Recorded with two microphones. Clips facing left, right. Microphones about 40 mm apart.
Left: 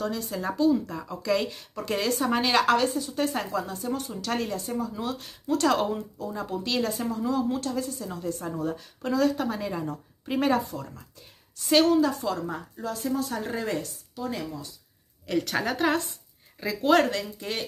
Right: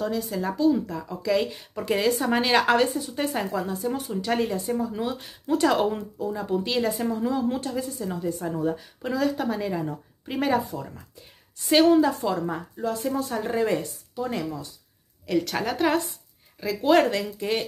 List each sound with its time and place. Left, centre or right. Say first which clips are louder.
0.0 s a woman's voice: right 3 dB; centre
2.6 s a woman's voice: right 2 dB; centre
4.1 s a woman's voice: right 4 dB; centre
4.8 s a woman's voice: right 3 dB; centre
5.9 s speech: right 3 dB; right
6.2 s a woman's voice: right 5 dB; centre
6.6 s a woman's voice: left 1 dB; centre
11.9 s a woman's voice: right 3 dB; right
14.1 s speech: right 4 dB; right
15.2 s a woman's voice: right 1 dB; centre
17.0 s a woman's voice: right 3 dB; centre